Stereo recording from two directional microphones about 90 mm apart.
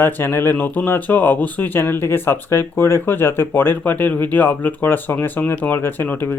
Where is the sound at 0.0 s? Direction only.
25° left (ahead or behind).